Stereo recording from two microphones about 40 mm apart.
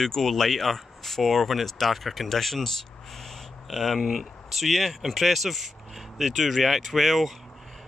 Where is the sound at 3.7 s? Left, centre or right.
Centre.